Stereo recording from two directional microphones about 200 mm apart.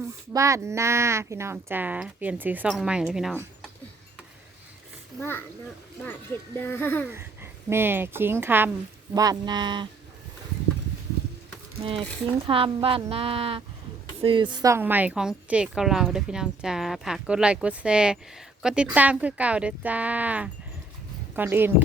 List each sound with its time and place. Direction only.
0.0 s speech: 15° right (ahead or behind)
6.6 s a child's voice: 10° left (ahead or behind)
7.1 s a woman's voice: 10° right (ahead or behind)
11.8 s a woman's voice: 25° right (ahead or behind); by 21.8 s 10° right (ahead or behind)